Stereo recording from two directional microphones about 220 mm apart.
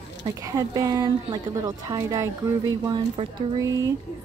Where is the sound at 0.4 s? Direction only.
15° right (ahead or behind).